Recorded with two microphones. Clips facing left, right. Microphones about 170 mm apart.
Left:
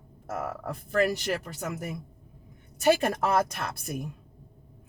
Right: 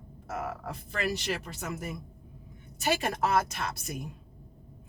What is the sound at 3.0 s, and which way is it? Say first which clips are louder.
Speech: left 2 dB; 50° left (ahead or behind).